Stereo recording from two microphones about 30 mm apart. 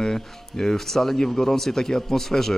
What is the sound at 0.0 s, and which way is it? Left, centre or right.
Speech, centre.